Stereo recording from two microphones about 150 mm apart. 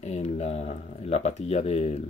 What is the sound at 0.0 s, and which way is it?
Speech, 45° left (ahead or behind).